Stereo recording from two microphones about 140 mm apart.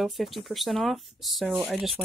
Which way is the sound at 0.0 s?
Centre (ahead or behind).